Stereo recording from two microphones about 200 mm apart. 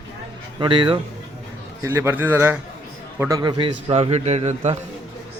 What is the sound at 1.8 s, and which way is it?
A man's voice, 10° right (ahead or behind).